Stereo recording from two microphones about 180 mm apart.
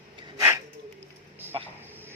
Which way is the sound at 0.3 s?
15° right (ahead or behind).